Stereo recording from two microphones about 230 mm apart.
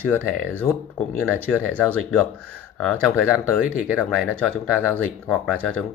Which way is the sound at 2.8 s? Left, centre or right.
Centre.